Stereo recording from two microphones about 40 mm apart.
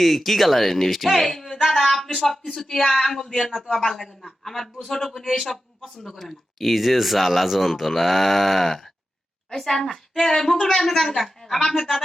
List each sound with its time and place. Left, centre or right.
0.0 s speech: centre